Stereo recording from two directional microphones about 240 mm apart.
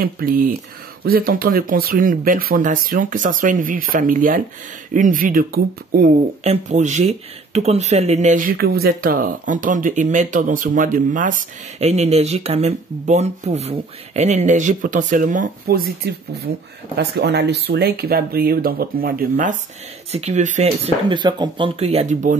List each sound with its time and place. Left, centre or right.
0.0 s speech: right
16.9 s speech: right